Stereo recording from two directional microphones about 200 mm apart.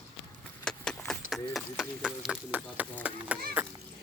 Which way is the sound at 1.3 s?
Centre (ahead or behind).